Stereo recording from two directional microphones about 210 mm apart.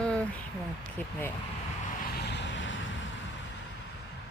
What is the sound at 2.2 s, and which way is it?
Vehicle, 55° left (ahead or behind).